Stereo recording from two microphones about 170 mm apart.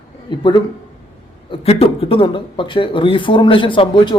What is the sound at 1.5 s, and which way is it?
Speech, 35° left (ahead or behind).